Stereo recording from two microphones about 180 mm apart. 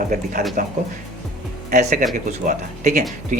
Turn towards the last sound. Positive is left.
turn(degrees=-45)  # may be behind; listen again after turning